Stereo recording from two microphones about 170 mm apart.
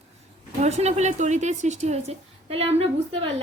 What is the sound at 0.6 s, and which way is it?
A woman's voice, 40° right (ahead or behind).